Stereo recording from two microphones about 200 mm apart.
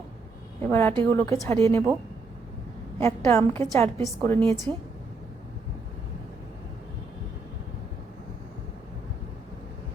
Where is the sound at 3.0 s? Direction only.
15° left (ahead or behind).